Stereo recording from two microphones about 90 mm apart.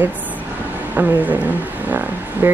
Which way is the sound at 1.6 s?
20° right (ahead or behind).